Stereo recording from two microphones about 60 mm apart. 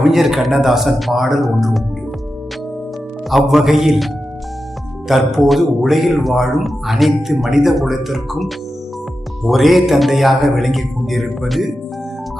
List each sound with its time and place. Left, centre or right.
0.0 s speech: centre
3.2 s speech: centre